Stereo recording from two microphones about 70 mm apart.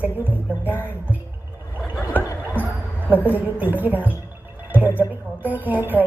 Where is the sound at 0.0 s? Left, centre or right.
Right.